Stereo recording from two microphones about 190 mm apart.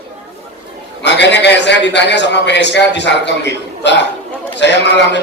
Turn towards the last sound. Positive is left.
turn(degrees=65)  # may be behind; listen again after turning